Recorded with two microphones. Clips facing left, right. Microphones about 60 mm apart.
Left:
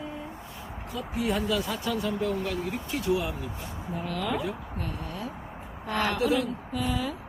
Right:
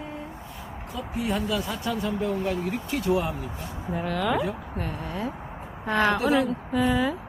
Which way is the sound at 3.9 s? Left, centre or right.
Right.